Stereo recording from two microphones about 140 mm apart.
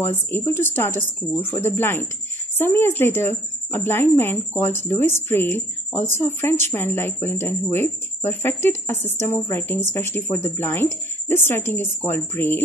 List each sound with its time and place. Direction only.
0.0 s a woman's voice: 15° left (ahead or behind)